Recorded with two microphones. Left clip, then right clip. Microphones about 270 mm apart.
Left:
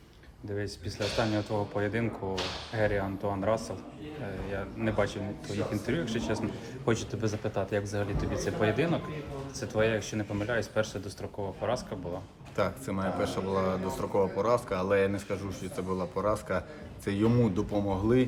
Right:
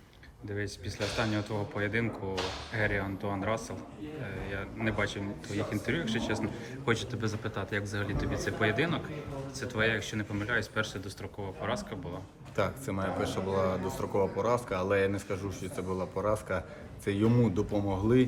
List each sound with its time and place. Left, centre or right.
0.5 s speech: centre